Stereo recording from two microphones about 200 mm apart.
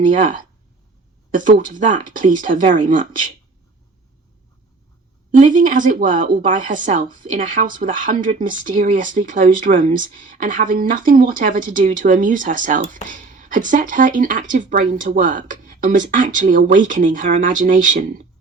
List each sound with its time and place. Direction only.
1.4 s speech: 40° right (ahead or behind)
5.4 s speech: 40° right (ahead or behind)